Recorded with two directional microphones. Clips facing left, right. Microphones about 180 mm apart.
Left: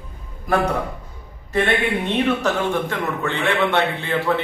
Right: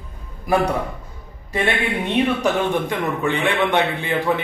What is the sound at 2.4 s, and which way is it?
A man's voice, 15° right (ahead or behind).